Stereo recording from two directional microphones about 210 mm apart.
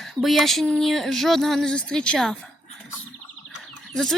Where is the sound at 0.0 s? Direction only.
Centre (ahead or behind).